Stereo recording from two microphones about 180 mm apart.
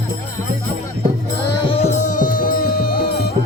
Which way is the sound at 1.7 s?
35° left (ahead or behind).